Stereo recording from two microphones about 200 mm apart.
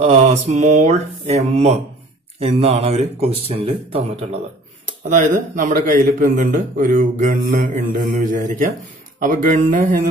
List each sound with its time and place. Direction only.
0.0 s a man's voice: 35° right (ahead or behind)
5.6 s a man's voice: 40° right (ahead or behind)